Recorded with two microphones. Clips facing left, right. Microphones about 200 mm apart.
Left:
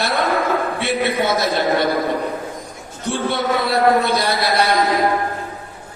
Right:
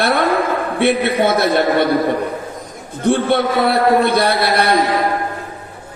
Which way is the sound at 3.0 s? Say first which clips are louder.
Right 6 dB; 60° right (ahead or behind).